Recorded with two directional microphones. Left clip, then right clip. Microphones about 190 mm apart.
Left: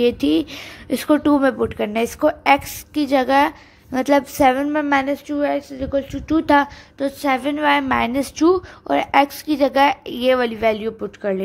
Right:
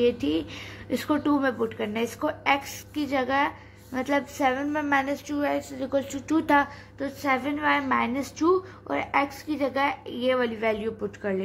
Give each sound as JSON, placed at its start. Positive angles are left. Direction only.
{"t": 0.0, "sound": "speech", "side_deg": 60}
{"t": 5.3, "sound": "a woman's voice", "side_deg": 30}
{"t": 6.4, "sound": "speech", "side_deg": 50}